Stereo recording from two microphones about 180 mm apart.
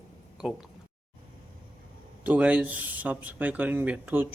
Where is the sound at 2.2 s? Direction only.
10° right (ahead or behind).